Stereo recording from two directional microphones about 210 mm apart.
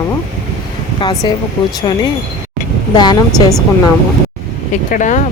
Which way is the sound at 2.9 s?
20° left (ahead or behind).